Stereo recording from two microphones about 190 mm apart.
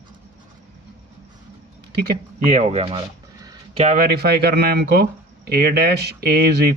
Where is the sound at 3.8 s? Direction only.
50° right (ahead or behind).